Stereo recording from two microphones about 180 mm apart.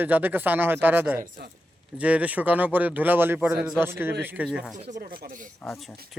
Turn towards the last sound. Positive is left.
turn(degrees=-45)  # may be behind; listen again after turning